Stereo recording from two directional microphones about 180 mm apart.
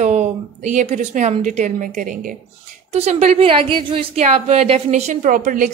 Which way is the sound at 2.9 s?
35° right (ahead or behind).